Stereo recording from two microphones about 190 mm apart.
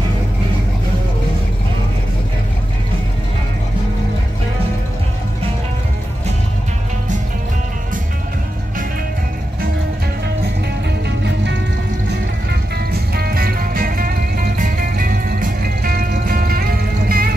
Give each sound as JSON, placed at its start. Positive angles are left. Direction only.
{"t": 12.1, "sound": "music", "side_deg": -55}